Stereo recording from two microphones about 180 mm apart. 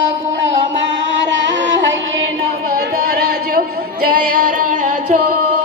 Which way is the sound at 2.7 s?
55° right (ahead or behind).